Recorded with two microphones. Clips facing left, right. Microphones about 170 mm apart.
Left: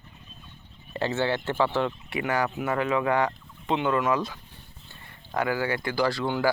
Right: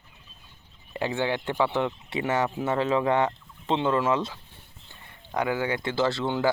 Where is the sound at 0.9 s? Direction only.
15° right (ahead or behind).